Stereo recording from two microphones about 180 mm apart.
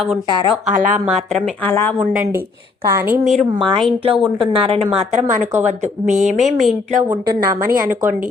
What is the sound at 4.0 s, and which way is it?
Speech, 30° right (ahead or behind).